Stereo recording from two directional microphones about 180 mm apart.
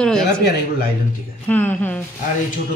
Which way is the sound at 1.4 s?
10° left (ahead or behind).